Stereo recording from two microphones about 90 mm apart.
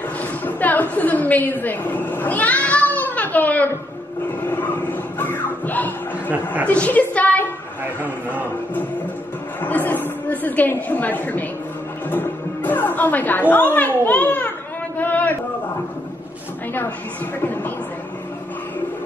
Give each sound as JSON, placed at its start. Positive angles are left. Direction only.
{"t": 0.2, "sound": "a sound", "side_deg": 20}
{"t": 6.3, "sound": "a woman's voice", "side_deg": -20}
{"t": 6.7, "sound": "a woman's voice", "side_deg": 15}
{"t": 9.6, "sound": "a woman's voice", "side_deg": 20}
{"t": 15.0, "sound": "a sound", "side_deg": 20}
{"t": 17.4, "sound": "a woman's voice", "side_deg": 20}